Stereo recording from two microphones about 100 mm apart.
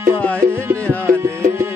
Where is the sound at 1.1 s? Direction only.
25° right (ahead or behind).